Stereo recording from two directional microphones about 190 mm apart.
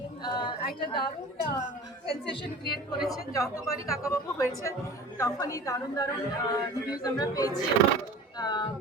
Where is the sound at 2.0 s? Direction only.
25° left (ahead or behind).